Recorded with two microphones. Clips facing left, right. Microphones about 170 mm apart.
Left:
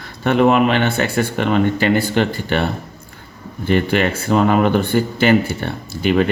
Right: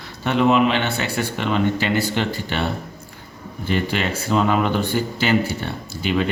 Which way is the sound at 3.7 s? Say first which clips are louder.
Left 6 dB; 55° left (ahead or behind).